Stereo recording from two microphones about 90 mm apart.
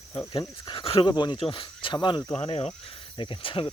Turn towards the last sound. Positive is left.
turn(degrees=85)